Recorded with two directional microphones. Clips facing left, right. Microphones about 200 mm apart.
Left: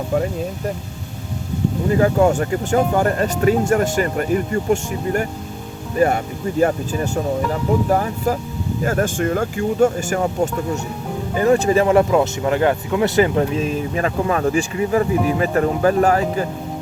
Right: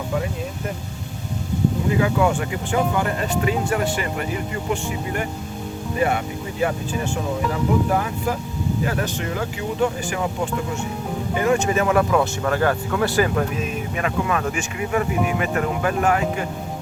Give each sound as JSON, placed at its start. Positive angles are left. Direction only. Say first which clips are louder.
{"t": 2.0, "sound": "speech", "louder": "left 5 dB", "side_deg": 40}